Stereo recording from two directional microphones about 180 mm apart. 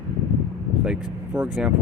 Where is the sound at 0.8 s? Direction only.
5° right (ahead or behind).